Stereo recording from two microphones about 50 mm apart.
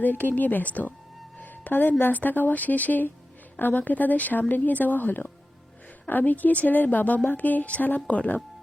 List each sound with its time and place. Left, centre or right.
0.0 s a woman's voice: left